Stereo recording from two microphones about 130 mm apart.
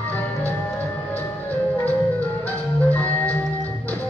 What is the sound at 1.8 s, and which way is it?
Organ, 10° left (ahead or behind).